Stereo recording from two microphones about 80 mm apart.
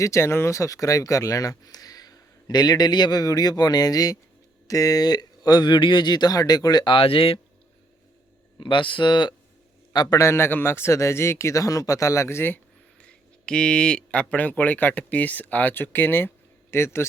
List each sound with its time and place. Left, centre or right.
0.0 s speech: left
8.5 s speech: left
9.9 s speech: left
10.2 s speech: left
13.0 s speech: centre; by 17.1 s left